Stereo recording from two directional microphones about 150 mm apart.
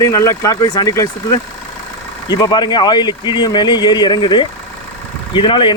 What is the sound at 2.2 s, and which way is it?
Speech, 30° left (ahead or behind).